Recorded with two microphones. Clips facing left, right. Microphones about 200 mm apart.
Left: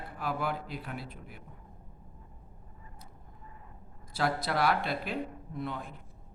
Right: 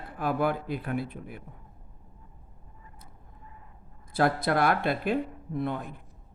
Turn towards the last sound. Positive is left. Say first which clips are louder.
# right 6 dB
turn(degrees=-55)  # may be behind; listen again after turning